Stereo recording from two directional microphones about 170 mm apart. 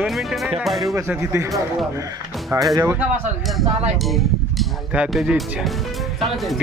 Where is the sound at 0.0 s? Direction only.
Centre (ahead or behind).